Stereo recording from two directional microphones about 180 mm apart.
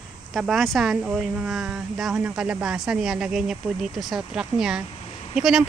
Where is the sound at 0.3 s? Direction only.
Centre (ahead or behind).